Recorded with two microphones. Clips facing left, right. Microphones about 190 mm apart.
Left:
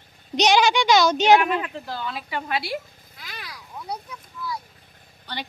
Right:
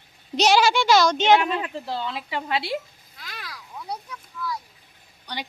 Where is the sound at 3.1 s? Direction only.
Centre (ahead or behind).